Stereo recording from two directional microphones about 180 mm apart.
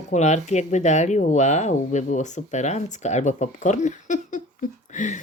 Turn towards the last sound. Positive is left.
turn(degrees=45)  # may be behind; listen again after turning